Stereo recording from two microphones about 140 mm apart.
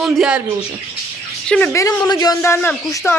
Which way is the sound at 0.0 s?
5° right (ahead or behind).